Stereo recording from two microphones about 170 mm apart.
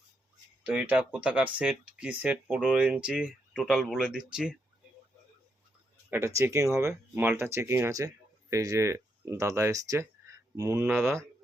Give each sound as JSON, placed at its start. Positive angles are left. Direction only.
{"t": 0.6, "sound": "speech", "side_deg": -10}
{"t": 6.1, "sound": "speech", "side_deg": -15}